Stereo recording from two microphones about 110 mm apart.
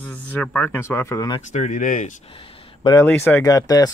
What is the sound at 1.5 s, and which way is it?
Speech, 90° left.